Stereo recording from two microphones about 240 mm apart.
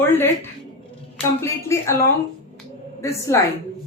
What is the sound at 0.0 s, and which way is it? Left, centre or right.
Speech, centre.